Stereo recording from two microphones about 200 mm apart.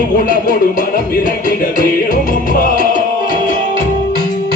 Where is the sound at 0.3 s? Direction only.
40° left (ahead or behind).